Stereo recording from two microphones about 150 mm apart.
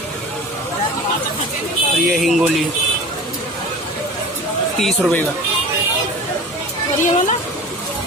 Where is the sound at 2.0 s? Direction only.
Centre (ahead or behind).